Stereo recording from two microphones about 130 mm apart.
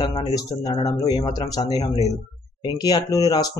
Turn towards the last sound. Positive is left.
turn(degrees=25)  # may be behind; listen again after turning